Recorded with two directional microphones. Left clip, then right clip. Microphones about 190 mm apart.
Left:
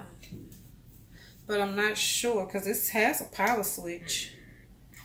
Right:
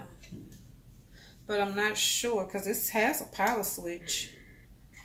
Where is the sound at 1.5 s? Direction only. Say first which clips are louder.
Left 1 dB; 15° right (ahead or behind).